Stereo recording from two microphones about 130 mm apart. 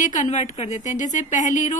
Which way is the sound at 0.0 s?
70° left (ahead or behind).